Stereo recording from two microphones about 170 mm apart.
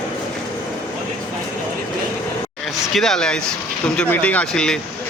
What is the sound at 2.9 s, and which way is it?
Speech, centre (ahead or behind).